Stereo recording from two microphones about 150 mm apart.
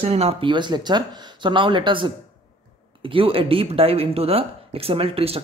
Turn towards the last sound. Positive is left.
turn(degrees=-40)  # may be behind; listen again after turning